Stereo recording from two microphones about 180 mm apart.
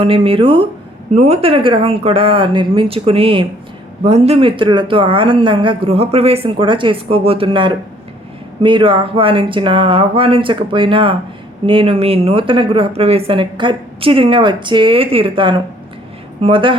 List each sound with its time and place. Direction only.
0.0 s speech: 30° right (ahead or behind)